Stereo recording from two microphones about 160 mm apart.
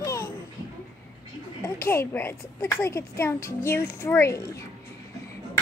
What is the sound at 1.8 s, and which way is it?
A child's voice, 15° left (ahead or behind).